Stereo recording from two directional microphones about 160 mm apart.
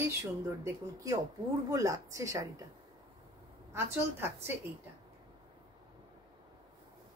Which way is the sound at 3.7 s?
15° right (ahead or behind).